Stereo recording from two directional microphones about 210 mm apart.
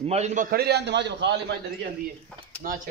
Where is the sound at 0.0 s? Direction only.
30° right (ahead or behind); by 1.4 s 55° right (ahead or behind).